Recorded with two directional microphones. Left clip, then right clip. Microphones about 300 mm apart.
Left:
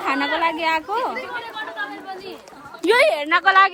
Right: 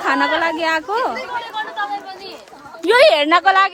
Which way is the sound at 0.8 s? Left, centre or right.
Right.